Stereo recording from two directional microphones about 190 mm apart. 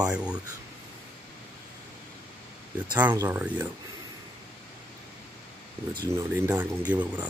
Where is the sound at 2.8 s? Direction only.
10° right (ahead or behind).